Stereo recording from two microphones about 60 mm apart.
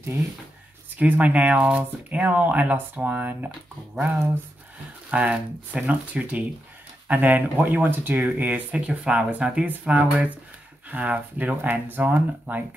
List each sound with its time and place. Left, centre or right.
0.9 s speech: right
5.1 s speech: centre